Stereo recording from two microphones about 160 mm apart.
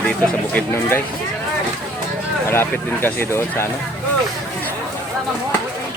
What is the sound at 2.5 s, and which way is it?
Speech, 15° left (ahead or behind).